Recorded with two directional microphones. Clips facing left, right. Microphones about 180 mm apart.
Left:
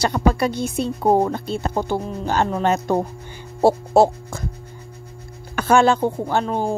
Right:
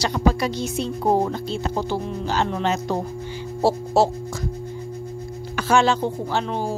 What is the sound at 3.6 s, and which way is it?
Hum, 55° left (ahead or behind).